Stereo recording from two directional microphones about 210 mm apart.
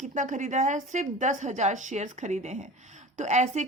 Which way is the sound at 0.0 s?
35° right (ahead or behind).